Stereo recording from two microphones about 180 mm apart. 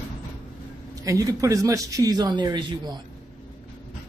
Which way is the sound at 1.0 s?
20° right (ahead or behind).